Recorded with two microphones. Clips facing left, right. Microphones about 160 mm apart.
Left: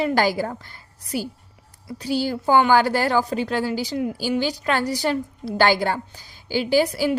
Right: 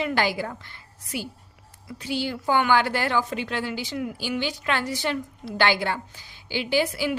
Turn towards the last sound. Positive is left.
turn(degrees=40)  # may be behind; listen again after turning